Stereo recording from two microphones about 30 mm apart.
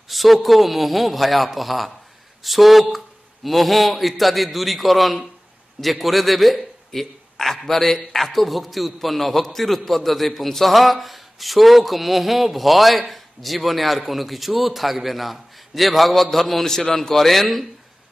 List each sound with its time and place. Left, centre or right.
0.1 s a man's voice: centre
16.6 s a man's voice: centre
17.1 s a man's voice: centre